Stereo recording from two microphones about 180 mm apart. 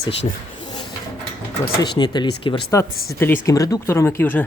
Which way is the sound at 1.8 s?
25° left (ahead or behind).